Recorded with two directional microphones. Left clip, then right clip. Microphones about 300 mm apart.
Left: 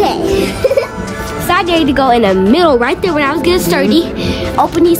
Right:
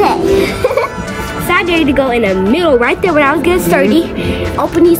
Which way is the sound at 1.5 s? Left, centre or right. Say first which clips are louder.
Even; centre.